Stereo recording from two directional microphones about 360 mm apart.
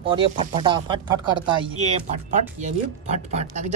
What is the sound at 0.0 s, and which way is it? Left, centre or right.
A woman's voice, centre.